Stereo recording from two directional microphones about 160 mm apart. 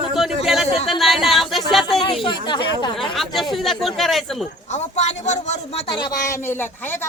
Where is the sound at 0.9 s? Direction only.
Centre (ahead or behind).